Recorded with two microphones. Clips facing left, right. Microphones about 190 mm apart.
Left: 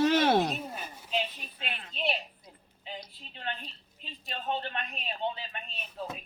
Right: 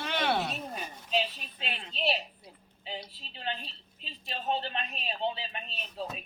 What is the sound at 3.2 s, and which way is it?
A man's voice, 20° right (ahead or behind).